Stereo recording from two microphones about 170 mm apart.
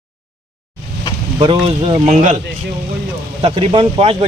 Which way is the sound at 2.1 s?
45° right (ahead or behind).